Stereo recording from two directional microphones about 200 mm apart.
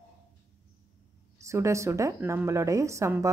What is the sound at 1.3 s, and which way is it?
A woman's voice, 15° right (ahead or behind).